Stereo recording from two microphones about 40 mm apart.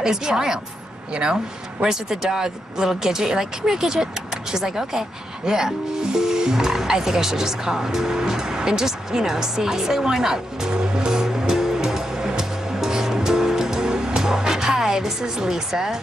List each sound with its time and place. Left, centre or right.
0.0 s a woman's voice: centre
1.8 s speech: centre